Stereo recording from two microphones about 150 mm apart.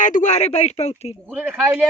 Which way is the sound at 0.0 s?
60° left (ahead or behind).